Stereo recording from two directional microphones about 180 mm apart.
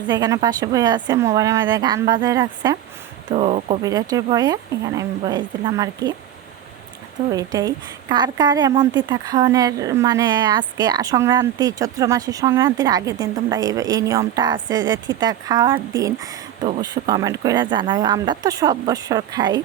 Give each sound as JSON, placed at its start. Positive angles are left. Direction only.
{"t": 0.1, "sound": "speech", "side_deg": -20}
{"t": 3.2, "sound": "speech", "side_deg": -35}
{"t": 3.8, "sound": "speech", "side_deg": -20}
{"t": 7.3, "sound": "speech", "side_deg": -20}